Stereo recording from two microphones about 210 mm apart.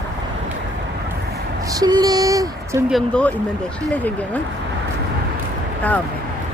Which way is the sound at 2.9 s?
5° left (ahead or behind).